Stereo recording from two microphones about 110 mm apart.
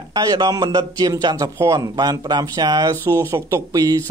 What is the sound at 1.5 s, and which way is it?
Speech, 25° right (ahead or behind).